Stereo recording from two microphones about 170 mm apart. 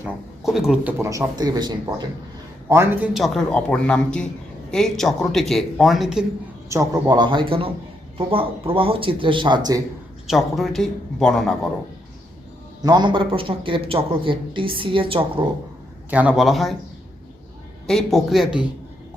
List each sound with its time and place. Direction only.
0.0 s speech: 5° right (ahead or behind); by 2.0 s 25° right (ahead or behind)
2.6 s speech: 15° right (ahead or behind)
6.7 s a man's voice: 20° right (ahead or behind)
10.2 s speech: centre (ahead or behind)
12.8 s a man's voice: 25° right (ahead or behind)
16.0 s speech: 10° right (ahead or behind)
17.8 s speech: centre (ahead or behind)